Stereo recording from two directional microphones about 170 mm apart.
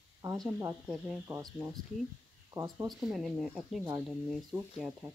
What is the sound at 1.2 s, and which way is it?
Speech, 15° right (ahead or behind).